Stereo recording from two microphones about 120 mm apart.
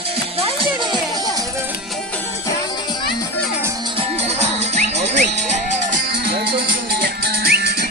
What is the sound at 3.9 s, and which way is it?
Music, 55° right (ahead or behind).